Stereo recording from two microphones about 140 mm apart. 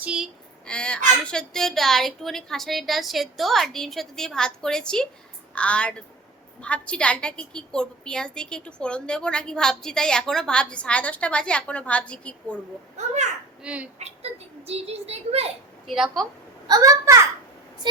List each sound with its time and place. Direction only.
0.0 s speech: 5° right (ahead or behind)
0.6 s a woman's voice: 5° left (ahead or behind)
13.0 s a child's voice: 55° right (ahead or behind)
13.6 s speech: 10° right (ahead or behind)
14.7 s a child's voice: 45° right (ahead or behind)
16.6 s a child's voice: 25° right (ahead or behind)